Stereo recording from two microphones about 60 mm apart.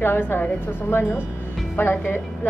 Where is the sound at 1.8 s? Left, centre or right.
Left.